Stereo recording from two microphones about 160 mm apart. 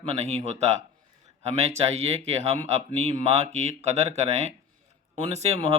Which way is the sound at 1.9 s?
40° right (ahead or behind).